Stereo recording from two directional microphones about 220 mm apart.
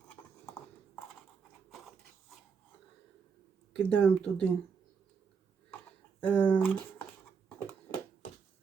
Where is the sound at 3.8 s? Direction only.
5° left (ahead or behind).